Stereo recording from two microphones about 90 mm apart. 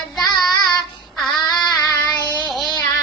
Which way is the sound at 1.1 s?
Centre (ahead or behind).